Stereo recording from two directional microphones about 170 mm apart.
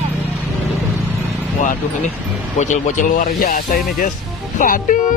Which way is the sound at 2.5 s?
45° left (ahead or behind).